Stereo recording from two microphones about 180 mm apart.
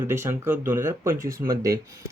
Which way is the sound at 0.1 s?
15° right (ahead or behind).